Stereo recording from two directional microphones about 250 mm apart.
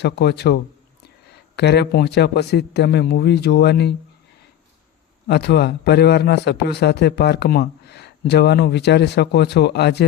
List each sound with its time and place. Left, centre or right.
0.0 s a man's voice: left
5.3 s a man's voice: left